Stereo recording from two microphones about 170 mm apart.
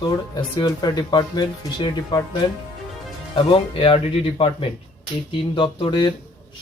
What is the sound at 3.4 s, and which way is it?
Speech, 30° left (ahead or behind).